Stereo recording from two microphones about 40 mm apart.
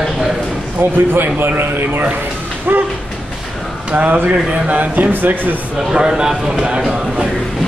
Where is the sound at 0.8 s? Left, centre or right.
Right.